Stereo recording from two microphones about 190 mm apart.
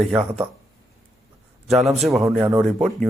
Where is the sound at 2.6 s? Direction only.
Centre (ahead or behind).